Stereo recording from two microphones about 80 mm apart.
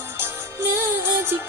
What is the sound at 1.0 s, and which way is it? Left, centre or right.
Music, right.